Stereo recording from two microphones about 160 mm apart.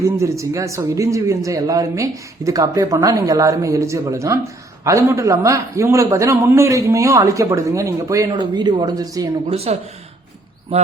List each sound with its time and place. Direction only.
0.0 s a man's voice: 20° right (ahead or behind)
9.5 s speech: 40° right (ahead or behind)